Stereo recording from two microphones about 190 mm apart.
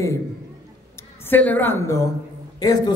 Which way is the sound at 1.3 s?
10° left (ahead or behind).